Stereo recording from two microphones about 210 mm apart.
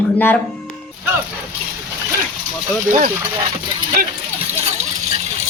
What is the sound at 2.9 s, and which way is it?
Speech, 40° right (ahead or behind).